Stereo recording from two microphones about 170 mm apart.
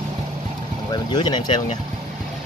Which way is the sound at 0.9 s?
25° left (ahead or behind).